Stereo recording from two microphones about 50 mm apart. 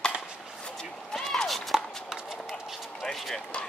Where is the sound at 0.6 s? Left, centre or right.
Centre.